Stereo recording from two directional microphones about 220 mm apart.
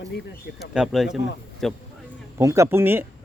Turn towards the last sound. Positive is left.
turn(degrees=-10)  # may be behind; listen again after turning